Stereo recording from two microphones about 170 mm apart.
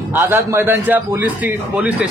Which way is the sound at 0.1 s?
15° right (ahead or behind).